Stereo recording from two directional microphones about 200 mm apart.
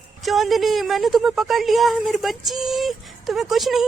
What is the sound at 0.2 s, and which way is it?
A woman's voice, centre (ahead or behind).